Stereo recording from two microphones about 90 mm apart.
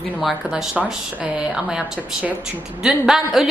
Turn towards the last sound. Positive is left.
turn(degrees=-5)  # may be behind; listen again after turning